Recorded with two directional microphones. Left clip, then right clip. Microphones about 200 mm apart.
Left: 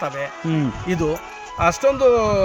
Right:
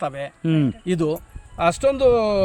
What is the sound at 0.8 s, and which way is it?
Speech, 10° left (ahead or behind).